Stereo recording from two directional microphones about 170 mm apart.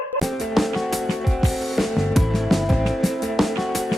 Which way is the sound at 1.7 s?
Centre (ahead or behind).